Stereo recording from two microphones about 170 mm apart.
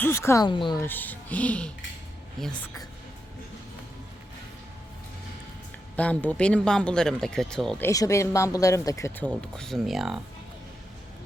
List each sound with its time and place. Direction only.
0.0 s speech: 15° left (ahead or behind)
0.8 s speech: 10° left (ahead or behind)
6.0 s speech: 10° left (ahead or behind)
7.8 s speech: 15° left (ahead or behind); by 10.2 s centre (ahead or behind)